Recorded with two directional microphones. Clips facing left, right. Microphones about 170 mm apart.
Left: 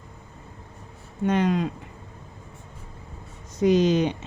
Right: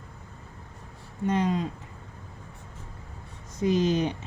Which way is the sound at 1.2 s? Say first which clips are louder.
Left 3 dB; 75° left (ahead or behind).